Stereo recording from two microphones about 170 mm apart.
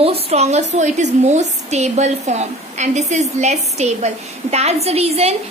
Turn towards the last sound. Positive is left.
turn(degrees=-40)  # may be behind; listen again after turning